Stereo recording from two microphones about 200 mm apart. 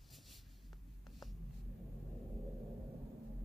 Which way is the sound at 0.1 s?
Centre (ahead or behind).